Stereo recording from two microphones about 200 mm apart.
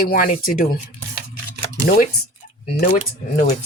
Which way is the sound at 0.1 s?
45° left (ahead or behind).